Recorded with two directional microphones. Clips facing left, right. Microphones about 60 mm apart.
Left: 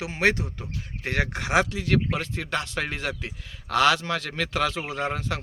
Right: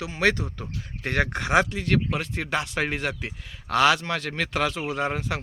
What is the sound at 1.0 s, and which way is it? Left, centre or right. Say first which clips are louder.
Speech: right 2 dB; centre.